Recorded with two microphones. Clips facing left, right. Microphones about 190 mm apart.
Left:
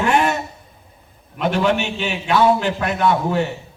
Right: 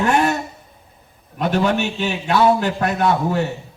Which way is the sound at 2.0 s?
45° right (ahead or behind).